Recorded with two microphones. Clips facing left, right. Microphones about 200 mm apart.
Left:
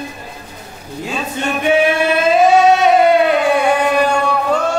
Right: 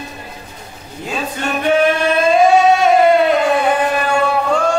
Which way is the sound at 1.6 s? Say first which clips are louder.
Even; 5° left (ahead or behind).